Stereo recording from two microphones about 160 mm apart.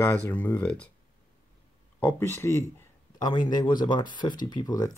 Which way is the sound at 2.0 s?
15° left (ahead or behind).